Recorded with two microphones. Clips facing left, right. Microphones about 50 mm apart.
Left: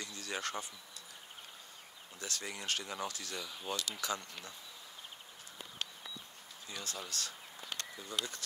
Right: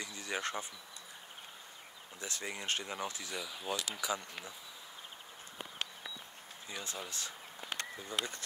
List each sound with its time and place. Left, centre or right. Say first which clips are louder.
0.0 s insect: right 2 dB; right
2.1 s speech: right 1 dB; right
3.3 s speech: right 2 dB; centre
3.7 s speech: right 1 dB; centre
6.7 s speech: right 1 dB; centre